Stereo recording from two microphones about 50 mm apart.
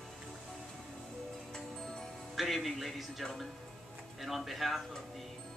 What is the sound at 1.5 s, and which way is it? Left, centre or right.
Music, centre.